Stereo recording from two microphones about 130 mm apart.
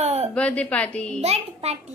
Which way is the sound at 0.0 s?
55° right (ahead or behind).